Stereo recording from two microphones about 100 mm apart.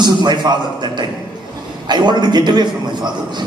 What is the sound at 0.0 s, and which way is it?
A man's voice, 45° right (ahead or behind).